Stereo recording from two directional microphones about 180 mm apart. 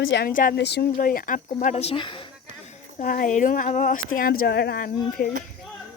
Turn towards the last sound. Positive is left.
turn(degrees=55)  # may be behind; listen again after turning